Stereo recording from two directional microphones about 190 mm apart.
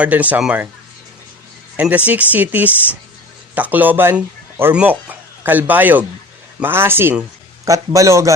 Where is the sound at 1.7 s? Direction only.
10° right (ahead or behind).